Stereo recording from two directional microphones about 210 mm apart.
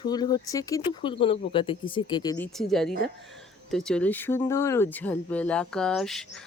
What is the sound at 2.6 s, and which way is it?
Speech, centre (ahead or behind).